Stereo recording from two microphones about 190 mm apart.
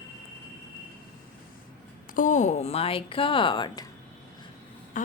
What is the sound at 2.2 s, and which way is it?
Speech, 40° left (ahead or behind).